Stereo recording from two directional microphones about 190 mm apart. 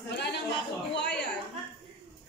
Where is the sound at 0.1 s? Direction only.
60° left (ahead or behind).